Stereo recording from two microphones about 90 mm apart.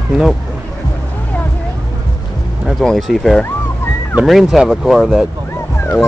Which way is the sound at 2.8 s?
5° left (ahead or behind).